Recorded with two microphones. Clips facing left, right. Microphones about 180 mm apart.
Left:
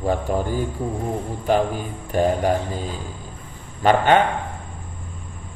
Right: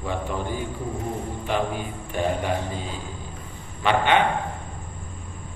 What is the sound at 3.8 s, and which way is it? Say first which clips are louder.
Speech: left 4 dB; 40° left (ahead or behind).